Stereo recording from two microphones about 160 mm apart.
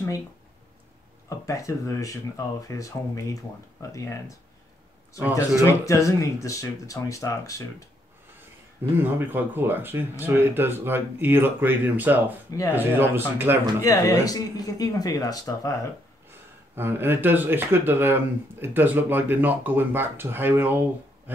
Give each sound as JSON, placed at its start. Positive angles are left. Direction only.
{"t": 1.4, "sound": "speech", "side_deg": 20}
{"t": 5.6, "sound": "speech", "side_deg": 20}
{"t": 8.9, "sound": "speech", "side_deg": -10}
{"t": 13.8, "sound": "speech", "side_deg": 20}
{"t": 16.3, "sound": "speech", "side_deg": -15}